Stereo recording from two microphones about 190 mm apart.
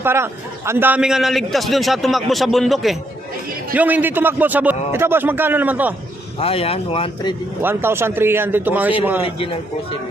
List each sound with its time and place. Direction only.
0.0 s a man's voice: 15° right (ahead or behind)
6.4 s speech: 30° left (ahead or behind)
7.6 s a man's voice: 10° right (ahead or behind)
9.2 s speech: 30° left (ahead or behind)